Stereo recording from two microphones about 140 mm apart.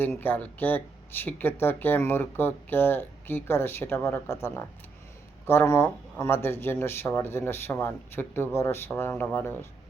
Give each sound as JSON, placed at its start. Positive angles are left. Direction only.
{"t": 0.0, "sound": "speech", "side_deg": 15}